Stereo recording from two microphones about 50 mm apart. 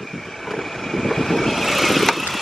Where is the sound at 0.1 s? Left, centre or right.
Centre.